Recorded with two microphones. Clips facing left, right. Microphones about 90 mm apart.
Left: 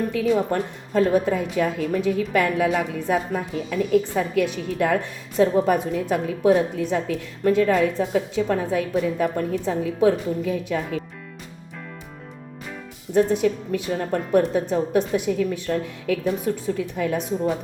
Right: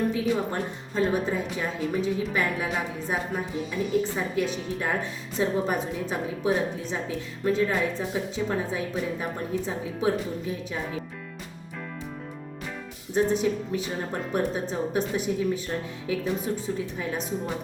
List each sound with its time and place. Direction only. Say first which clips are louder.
0.1 s a woman's voice: left 5 dB; 65° left (ahead or behind)
13.1 s a woman's voice: left 4 dB; 65° left (ahead or behind)